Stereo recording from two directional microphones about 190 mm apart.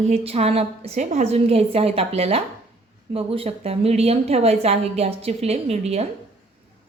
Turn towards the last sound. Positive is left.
turn(degrees=-35)  # may be behind; listen again after turning